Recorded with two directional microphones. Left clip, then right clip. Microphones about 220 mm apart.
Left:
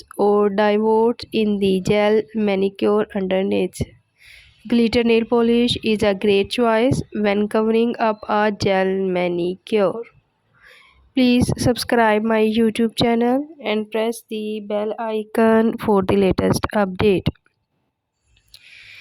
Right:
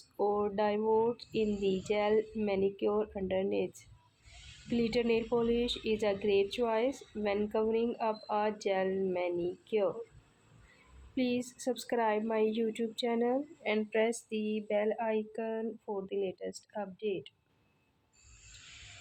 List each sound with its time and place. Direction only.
0.2 s speech: 45° left (ahead or behind)
11.1 s speech: 45° left (ahead or behind)